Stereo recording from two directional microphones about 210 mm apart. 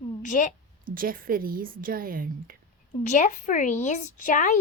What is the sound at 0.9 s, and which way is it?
A woman's voice, 45° right (ahead or behind).